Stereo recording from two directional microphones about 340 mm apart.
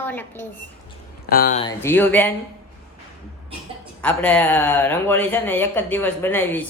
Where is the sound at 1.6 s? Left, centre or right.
Centre.